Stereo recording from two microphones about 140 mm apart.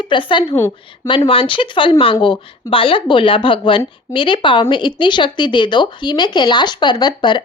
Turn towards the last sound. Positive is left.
turn(degrees=35)  # may be behind; listen again after turning